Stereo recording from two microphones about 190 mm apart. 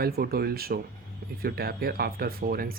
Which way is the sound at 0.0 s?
55° right (ahead or behind).